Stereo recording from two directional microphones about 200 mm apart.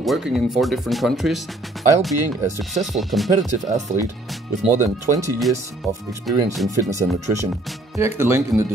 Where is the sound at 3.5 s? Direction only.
35° right (ahead or behind).